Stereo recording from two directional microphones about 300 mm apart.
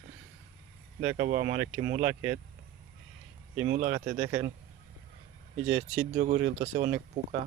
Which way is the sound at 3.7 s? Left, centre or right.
Right.